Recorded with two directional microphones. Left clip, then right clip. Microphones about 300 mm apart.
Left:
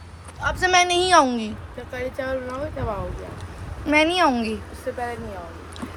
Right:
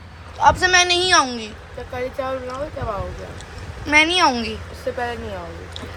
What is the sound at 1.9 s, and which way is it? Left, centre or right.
Speech, centre.